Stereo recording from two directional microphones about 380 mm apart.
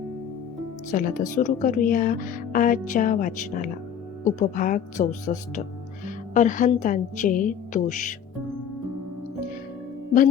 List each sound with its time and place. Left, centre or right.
0.9 s a woman's voice: left